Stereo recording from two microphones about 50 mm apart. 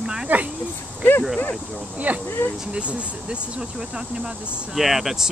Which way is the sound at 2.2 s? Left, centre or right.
Left.